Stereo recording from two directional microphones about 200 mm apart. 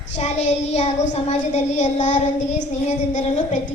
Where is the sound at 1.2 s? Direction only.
35° left (ahead or behind).